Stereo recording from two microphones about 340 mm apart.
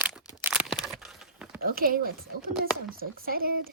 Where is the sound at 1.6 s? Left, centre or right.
Right.